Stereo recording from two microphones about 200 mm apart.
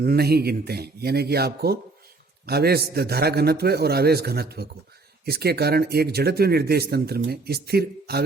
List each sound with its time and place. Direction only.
0.0 s speech: 50° right (ahead or behind)